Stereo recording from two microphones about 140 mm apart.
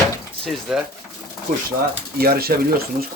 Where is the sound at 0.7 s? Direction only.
5° right (ahead or behind).